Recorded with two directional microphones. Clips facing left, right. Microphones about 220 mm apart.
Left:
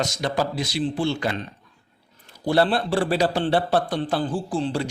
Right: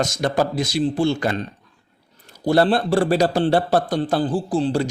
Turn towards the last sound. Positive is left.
turn(degrees=-35)  # may be behind; listen again after turning